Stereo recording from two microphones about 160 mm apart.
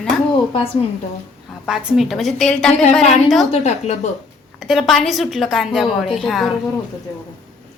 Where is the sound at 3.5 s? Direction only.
45° left (ahead or behind).